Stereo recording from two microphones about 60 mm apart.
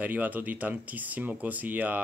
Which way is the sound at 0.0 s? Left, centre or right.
Right.